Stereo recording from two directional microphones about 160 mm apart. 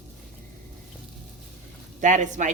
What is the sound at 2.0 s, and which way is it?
Speech, 50° right (ahead or behind).